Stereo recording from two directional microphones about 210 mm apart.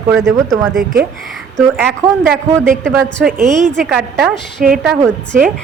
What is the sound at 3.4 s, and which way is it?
Speech, 35° right (ahead or behind).